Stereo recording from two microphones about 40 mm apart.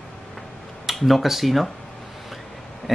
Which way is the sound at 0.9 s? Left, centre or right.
Centre.